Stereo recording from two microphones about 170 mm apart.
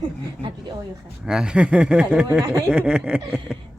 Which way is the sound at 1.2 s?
5° right (ahead or behind).